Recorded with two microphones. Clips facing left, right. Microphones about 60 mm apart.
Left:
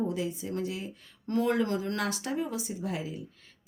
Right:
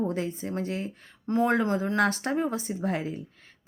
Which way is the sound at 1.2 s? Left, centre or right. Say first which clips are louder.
Right 3 dB; right.